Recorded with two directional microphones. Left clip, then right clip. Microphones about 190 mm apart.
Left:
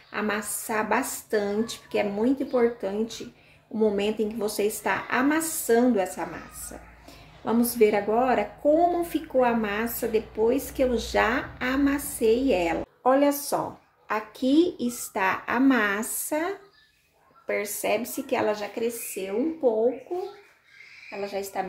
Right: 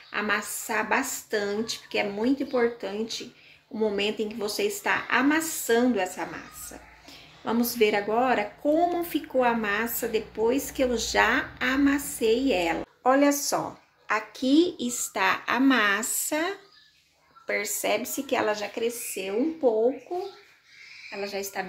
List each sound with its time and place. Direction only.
0.1 s a sound: 5° left (ahead or behind)
0.7 s a woman's voice: 5° left (ahead or behind)
19.1 s speech: 15° right (ahead or behind)
21.1 s a woman's voice: 15° left (ahead or behind)